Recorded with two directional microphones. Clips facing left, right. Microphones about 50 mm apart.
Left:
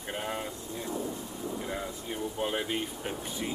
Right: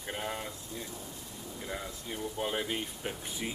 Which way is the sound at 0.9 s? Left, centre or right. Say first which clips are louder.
Left 10 dB; left.